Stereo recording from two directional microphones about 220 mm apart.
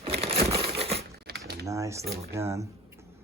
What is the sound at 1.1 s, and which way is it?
Typing, 45° right (ahead or behind).